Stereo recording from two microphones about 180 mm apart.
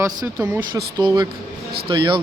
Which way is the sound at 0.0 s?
20° right (ahead or behind).